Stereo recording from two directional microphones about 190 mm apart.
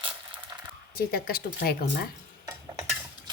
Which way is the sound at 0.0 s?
25° right (ahead or behind).